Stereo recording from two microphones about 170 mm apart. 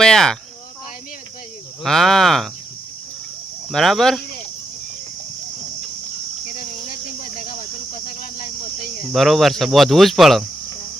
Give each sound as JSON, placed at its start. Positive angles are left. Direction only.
{"t": 0.0, "sound": "speech", "side_deg": 5}
{"t": 1.8, "sound": "speech", "side_deg": 0}
{"t": 3.7, "sound": "speech", "side_deg": 0}
{"t": 7.2, "sound": "cricket", "side_deg": 60}
{"t": 9.1, "sound": "speech", "side_deg": 0}